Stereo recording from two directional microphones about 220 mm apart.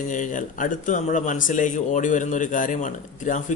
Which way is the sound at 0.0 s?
35° left (ahead or behind).